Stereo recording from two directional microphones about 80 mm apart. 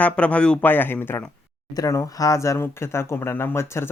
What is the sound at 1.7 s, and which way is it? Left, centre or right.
Speech, left.